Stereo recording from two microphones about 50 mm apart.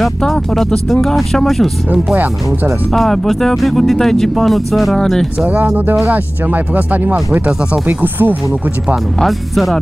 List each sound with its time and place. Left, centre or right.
0.2 s speech: centre
2.9 s speech: centre
6.0 s speech: right
9.2 s speech: centre